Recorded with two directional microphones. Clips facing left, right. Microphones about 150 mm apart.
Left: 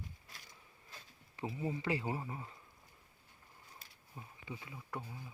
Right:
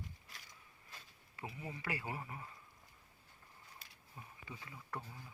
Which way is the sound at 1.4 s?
25° left (ahead or behind).